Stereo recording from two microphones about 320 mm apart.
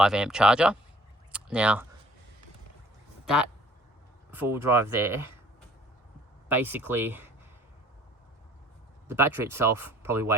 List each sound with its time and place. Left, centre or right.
0.0 s speech: centre
4.4 s speech: centre
6.5 s speech: centre
9.0 s speech: centre